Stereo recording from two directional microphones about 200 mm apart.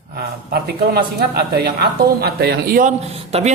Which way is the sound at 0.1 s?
50° right (ahead or behind).